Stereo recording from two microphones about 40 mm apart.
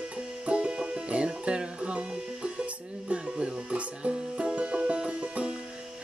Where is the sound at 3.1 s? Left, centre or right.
Right.